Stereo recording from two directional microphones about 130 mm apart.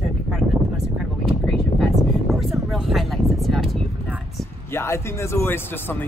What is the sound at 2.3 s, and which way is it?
Speech, centre (ahead or behind).